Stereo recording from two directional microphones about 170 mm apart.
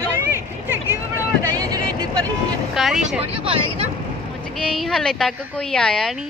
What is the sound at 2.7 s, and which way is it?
Speech, centre (ahead or behind).